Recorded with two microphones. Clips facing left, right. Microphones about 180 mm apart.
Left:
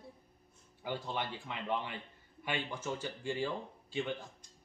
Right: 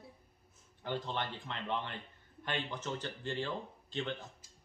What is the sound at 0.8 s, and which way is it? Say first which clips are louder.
Speech: even; 10° left (ahead or behind).